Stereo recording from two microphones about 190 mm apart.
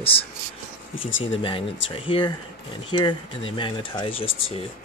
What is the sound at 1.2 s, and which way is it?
Speech, 25° left (ahead or behind).